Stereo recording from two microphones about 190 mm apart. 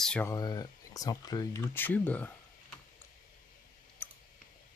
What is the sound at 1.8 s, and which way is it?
Speech, 10° left (ahead or behind).